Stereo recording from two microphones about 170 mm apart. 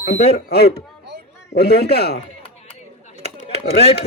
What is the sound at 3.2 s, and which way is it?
Chop, 70° left (ahead or behind).